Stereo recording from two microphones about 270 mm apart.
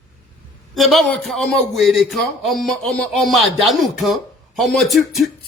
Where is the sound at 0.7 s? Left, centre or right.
Centre.